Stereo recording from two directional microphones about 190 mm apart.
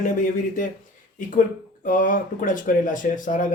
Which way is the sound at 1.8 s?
45° left (ahead or behind).